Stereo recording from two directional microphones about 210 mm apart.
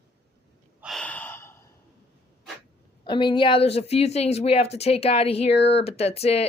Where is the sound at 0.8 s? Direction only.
Centre (ahead or behind).